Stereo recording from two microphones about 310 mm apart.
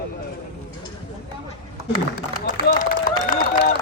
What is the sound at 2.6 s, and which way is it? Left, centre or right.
Run, left.